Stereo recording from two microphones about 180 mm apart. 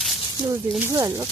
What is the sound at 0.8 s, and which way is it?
Speech, 15° right (ahead or behind).